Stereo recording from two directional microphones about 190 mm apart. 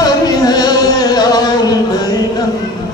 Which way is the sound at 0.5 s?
20° left (ahead or behind).